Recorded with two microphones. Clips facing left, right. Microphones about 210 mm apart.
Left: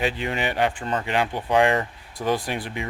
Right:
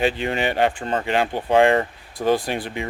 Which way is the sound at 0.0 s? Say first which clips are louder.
Right 4 dB; 30° right (ahead or behind).